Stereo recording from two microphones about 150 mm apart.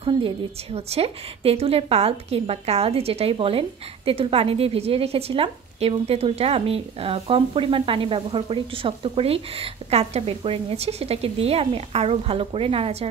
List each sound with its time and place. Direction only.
0.7 s a woman's voice: 45° right (ahead or behind)